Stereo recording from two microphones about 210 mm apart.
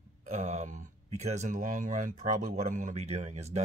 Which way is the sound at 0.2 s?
35° right (ahead or behind).